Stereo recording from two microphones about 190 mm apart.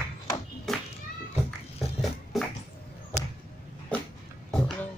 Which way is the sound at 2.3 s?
Centre (ahead or behind).